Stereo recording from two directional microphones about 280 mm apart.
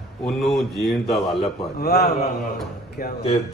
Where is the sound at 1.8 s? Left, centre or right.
Left.